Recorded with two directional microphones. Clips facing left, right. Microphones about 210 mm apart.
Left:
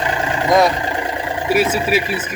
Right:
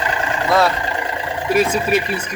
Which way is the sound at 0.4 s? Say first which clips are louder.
Left 3 dB; 15° left (ahead or behind).